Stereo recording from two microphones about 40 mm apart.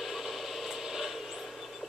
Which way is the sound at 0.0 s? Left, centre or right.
Centre.